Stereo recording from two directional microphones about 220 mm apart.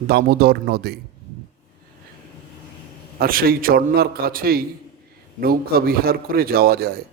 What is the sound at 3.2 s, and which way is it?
A man's voice, 40° right (ahead or behind).